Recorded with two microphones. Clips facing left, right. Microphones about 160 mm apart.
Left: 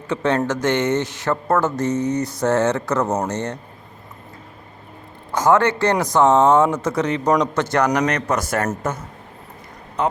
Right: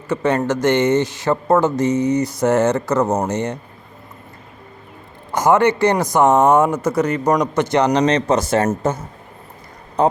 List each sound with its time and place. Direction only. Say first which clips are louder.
0.1 s speech: right 2 dB; 5° right (ahead or behind)
5.3 s speech: right 2 dB; 15° right (ahead or behind); by 10.1 s 35° right (ahead or behind)